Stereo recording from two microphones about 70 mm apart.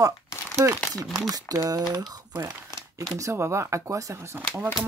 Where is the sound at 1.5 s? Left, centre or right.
Right.